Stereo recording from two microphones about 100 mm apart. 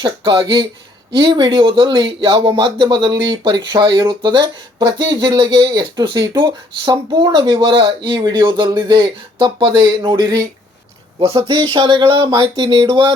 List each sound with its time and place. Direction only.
0.0 s speech: 50° right (ahead or behind)
11.3 s speech: 55° right (ahead or behind)